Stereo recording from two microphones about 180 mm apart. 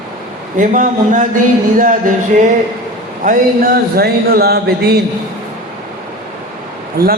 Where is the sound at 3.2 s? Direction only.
55° right (ahead or behind).